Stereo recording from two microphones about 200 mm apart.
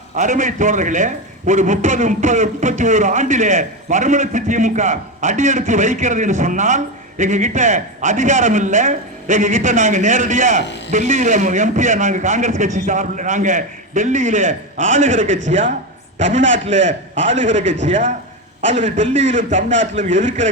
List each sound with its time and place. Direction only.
0.2 s a man's voice: 40° right (ahead or behind)
16.7 s a man's voice: 65° right (ahead or behind)
17.2 s a man's voice: 35° right (ahead or behind)